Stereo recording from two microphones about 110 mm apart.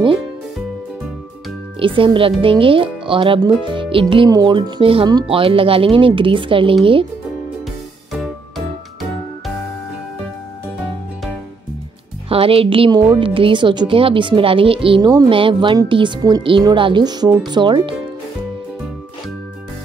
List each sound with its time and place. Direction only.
1.8 s a woman's voice: 50° right (ahead or behind)
4.3 s speech: 35° right (ahead or behind)
4.6 s a woman's voice: 50° right (ahead or behind)
8.1 s music: centre (ahead or behind)
12.3 s a woman's voice: 60° right (ahead or behind)